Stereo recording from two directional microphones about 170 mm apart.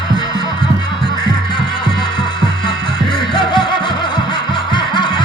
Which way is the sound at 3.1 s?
30° left (ahead or behind).